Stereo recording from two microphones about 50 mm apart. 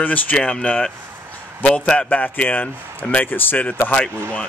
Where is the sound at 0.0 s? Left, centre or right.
Left.